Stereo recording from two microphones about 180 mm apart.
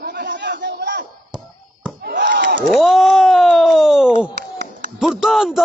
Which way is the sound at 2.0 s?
75° right (ahead or behind).